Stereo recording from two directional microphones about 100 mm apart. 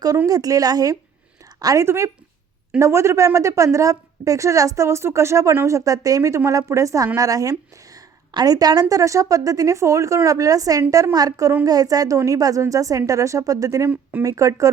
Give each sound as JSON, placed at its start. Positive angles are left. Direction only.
{"t": 0.3, "sound": "a woman's voice", "side_deg": -35}